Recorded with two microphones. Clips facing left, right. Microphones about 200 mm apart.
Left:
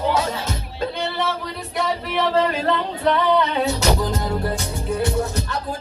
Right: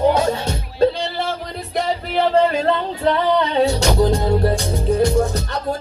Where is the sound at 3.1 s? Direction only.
30° right (ahead or behind).